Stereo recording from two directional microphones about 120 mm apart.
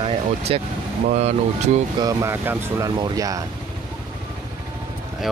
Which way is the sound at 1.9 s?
30° right (ahead or behind).